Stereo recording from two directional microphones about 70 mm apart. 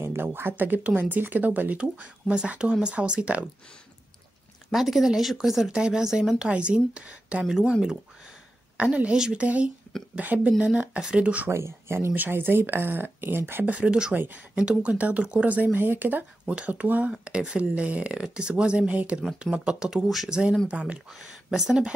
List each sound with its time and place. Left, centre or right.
0.0 s speech: right; by 3.4 s centre
4.6 s speech: centre
8.8 s speech: centre
11.5 s speech: right
12.1 s speech: right
13.7 s speech: centre
21.1 s speech: centre